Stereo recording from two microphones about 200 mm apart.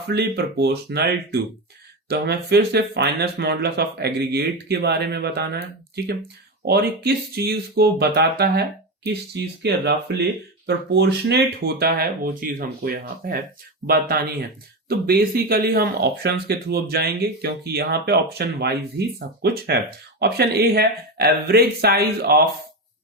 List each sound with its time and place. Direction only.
0.1 s speech: 55° right (ahead or behind)
6.7 s speech: 55° right (ahead or behind)